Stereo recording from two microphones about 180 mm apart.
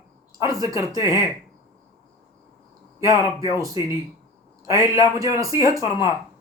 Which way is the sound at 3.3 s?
20° right (ahead or behind).